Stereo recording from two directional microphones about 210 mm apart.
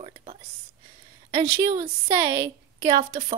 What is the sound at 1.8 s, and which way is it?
A woman's voice, 15° right (ahead or behind).